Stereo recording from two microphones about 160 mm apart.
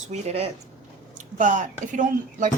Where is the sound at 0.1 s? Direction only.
40° right (ahead or behind).